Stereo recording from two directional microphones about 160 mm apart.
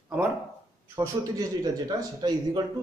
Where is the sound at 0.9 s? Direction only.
20° right (ahead or behind).